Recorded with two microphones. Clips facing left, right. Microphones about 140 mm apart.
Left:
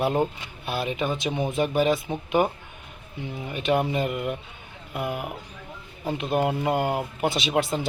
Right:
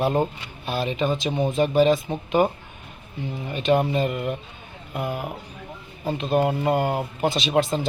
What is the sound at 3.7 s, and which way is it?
Speech, 10° left (ahead or behind).